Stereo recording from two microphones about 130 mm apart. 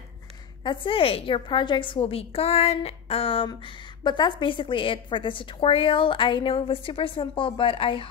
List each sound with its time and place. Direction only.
0.7 s a woman's voice: 40° left (ahead or behind)